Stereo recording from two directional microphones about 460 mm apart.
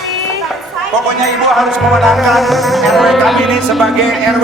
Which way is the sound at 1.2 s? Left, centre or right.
Centre.